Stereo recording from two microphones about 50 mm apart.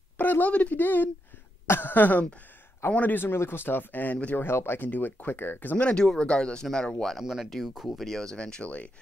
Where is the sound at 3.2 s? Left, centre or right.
Left.